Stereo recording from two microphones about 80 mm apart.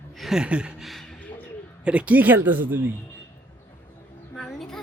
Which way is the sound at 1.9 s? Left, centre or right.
Centre.